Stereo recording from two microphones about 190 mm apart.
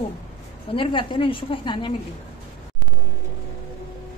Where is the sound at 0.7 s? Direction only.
25° left (ahead or behind).